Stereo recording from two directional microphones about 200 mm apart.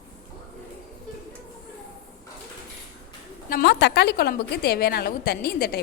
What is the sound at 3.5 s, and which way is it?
A woman's voice, 55° left (ahead or behind).